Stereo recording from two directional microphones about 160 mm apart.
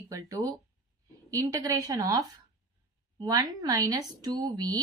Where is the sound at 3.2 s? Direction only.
25° right (ahead or behind).